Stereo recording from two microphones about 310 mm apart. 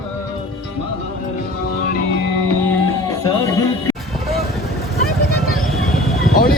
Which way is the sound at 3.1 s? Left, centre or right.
Centre.